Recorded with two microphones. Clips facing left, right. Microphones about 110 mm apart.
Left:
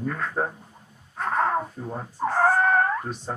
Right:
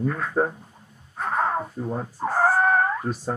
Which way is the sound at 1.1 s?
5° right (ahead or behind).